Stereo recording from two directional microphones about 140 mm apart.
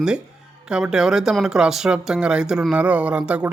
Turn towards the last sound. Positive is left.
turn(degrees=-10)  # may be behind; listen again after turning